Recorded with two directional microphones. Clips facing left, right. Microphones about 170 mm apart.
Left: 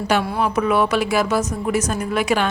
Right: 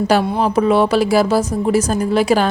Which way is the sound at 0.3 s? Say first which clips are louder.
Right 5 dB; 30° right (ahead or behind).